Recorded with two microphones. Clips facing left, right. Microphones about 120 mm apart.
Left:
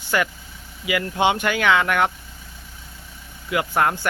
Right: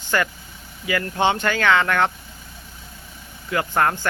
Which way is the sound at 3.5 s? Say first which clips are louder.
Even; 10° left (ahead or behind).